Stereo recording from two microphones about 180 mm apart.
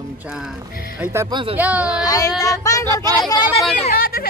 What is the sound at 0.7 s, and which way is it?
Speech, 55° left (ahead or behind).